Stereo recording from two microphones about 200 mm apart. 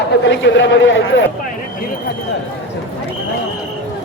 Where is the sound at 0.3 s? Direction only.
65° left (ahead or behind).